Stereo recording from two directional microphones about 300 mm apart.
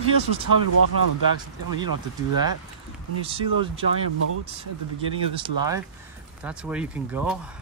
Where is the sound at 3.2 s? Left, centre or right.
Centre.